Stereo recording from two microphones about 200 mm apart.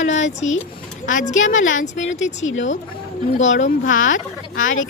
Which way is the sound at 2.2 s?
75° left (ahead or behind).